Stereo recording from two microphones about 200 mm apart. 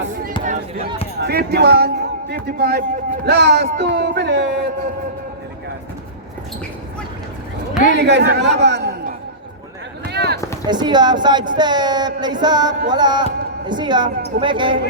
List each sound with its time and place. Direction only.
0.4 s a sound: 40° right (ahead or behind)
1.2 s speech: 55° right (ahead or behind)
7.9 s speech: 60° right (ahead or behind)
10.1 s run: 55° right (ahead or behind)
10.7 s music: 20° right (ahead or behind)